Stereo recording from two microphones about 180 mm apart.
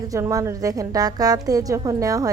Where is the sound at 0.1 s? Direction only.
20° right (ahead or behind).